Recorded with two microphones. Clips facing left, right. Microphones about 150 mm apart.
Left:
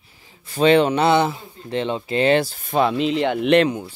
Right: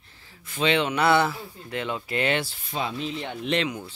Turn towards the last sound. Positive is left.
turn(degrees=65)  # may be behind; listen again after turning